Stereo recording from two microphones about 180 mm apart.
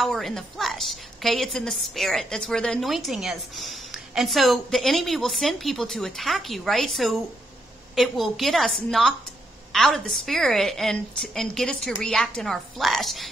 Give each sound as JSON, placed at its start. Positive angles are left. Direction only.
{"t": 0.0, "sound": "a woman's voice", "side_deg": 0}